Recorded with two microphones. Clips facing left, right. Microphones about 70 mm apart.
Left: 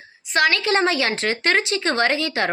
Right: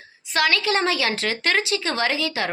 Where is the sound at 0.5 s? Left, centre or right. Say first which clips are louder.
Left 2 dB; left.